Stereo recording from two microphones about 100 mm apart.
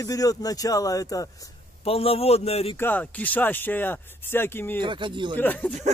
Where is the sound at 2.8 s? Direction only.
20° left (ahead or behind).